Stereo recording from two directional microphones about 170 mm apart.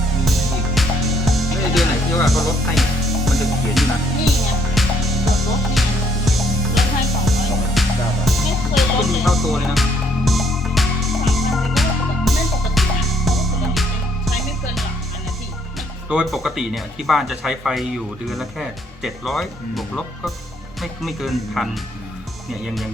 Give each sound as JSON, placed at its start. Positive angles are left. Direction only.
{"t": 0.3, "sound": "music", "side_deg": 0}
{"t": 16.0, "sound": "speech", "side_deg": -5}
{"t": 21.0, "sound": "speech", "side_deg": 0}